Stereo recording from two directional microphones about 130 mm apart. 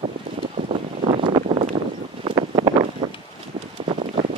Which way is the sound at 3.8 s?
55° right (ahead or behind).